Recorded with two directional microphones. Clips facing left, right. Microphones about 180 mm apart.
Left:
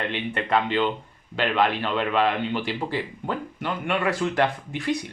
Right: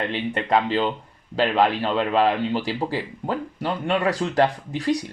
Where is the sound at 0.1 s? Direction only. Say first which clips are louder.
Right 3 dB; 35° right (ahead or behind).